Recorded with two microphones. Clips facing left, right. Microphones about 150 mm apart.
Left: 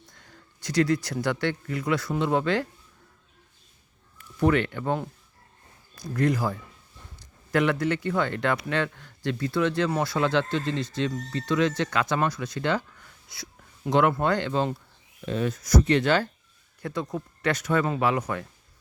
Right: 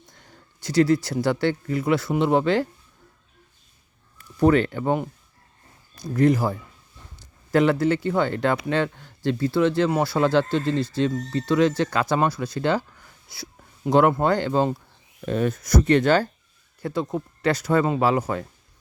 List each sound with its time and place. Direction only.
0.2 s speech: 25° right (ahead or behind)
4.4 s speech: 35° right (ahead or behind)
4.8 s speech: 20° right (ahead or behind)
6.1 s speech: 25° right (ahead or behind)
13.2 s a sound: 30° right (ahead or behind)
14.1 s speech: 30° right (ahead or behind)
15.3 s speech: 50° right (ahead or behind)
16.8 s speech: 30° right (ahead or behind)